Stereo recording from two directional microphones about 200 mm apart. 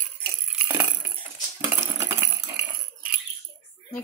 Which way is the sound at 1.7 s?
10° right (ahead or behind).